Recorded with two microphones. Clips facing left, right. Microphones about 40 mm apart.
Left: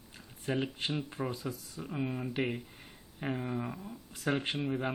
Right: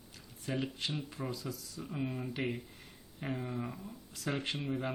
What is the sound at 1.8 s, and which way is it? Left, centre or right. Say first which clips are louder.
Speech: left 3 dB; centre.